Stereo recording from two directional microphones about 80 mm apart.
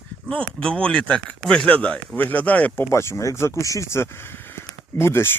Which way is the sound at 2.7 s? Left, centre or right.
Left.